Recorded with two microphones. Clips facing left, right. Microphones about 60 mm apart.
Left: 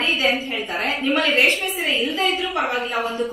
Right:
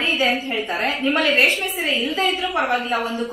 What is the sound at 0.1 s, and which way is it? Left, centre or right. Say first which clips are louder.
A woman's voice: right 1 dB; centre.